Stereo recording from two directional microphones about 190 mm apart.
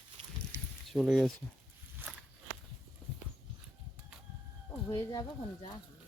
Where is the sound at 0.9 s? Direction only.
Centre (ahead or behind).